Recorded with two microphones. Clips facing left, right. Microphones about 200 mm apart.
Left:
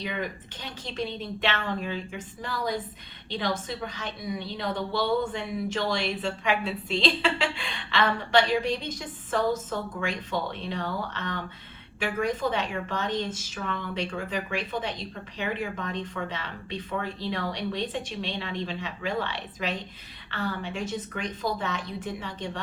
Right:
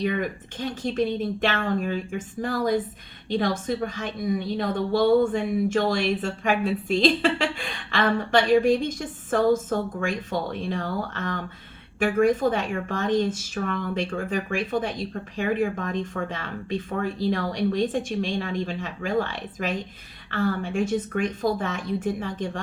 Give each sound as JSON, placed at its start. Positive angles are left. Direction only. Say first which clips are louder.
{"t": 0.0, "sound": "speech", "louder": "right 7 dB", "side_deg": -50}